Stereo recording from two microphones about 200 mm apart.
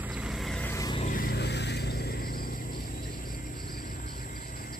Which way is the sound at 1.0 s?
40° left (ahead or behind).